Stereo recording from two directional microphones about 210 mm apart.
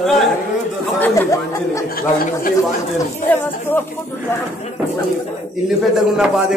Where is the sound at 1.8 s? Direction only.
45° left (ahead or behind).